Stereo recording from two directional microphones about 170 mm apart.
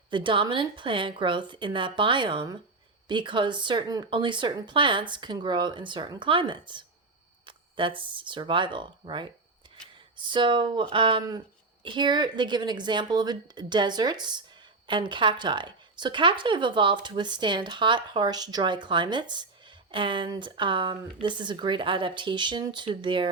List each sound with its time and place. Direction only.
0.1 s speech: 30° right (ahead or behind)
9.6 s chopping: 30° right (ahead or behind)
10.2 s speech: 30° right (ahead or behind)